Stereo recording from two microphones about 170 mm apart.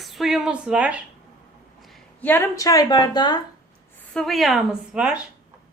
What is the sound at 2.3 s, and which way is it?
A woman's voice, 15° left (ahead or behind).